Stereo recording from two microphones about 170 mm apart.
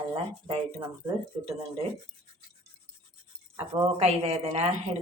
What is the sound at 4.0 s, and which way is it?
Speech, 40° right (ahead or behind).